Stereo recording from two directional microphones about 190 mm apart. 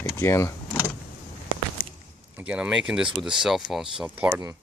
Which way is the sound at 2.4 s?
5° right (ahead or behind).